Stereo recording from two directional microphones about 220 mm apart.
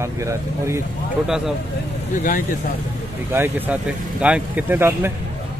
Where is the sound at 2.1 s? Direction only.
35° left (ahead or behind).